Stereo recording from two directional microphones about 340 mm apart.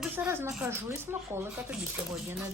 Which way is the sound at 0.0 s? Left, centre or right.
Centre.